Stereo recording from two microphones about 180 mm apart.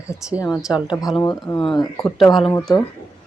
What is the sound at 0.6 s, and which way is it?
Speech, 5° right (ahead or behind).